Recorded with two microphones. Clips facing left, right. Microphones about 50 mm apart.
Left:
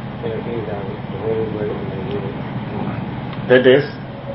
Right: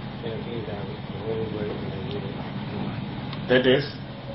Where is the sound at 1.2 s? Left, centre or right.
Left.